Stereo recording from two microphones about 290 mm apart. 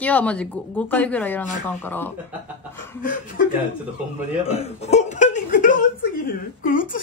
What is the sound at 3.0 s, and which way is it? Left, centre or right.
Speech, left.